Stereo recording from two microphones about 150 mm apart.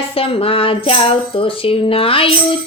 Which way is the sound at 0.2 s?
35° left (ahead or behind).